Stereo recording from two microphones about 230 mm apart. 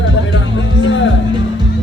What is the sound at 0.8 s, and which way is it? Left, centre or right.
Music, left.